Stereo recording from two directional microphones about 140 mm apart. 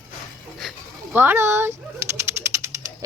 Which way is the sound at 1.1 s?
15° right (ahead or behind).